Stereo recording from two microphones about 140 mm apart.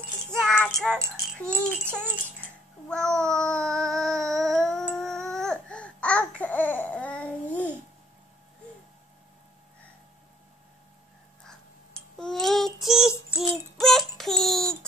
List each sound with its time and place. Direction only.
0.4 s music: 5° left (ahead or behind)
1.0 s a child's voice: 20° right (ahead or behind)
2.9 s child singing: 5° left (ahead or behind)
5.1 s babbling: 5° left (ahead or behind)
11.4 s a sound: 5° left (ahead or behind)
12.8 s child singing: 5° right (ahead or behind)